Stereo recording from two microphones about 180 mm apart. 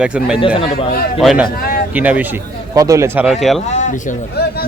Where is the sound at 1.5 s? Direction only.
55° left (ahead or behind).